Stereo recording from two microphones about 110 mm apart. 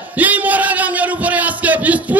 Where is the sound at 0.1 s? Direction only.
15° right (ahead or behind).